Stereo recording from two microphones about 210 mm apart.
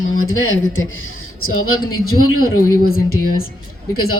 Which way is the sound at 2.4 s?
45° left (ahead or behind).